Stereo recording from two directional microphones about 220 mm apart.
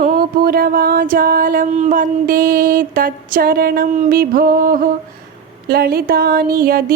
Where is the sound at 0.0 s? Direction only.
40° right (ahead or behind).